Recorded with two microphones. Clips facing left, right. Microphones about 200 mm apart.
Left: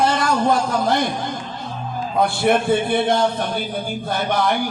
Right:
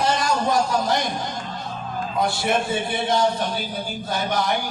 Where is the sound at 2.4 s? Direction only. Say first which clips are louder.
Left 6 dB; 55° left (ahead or behind).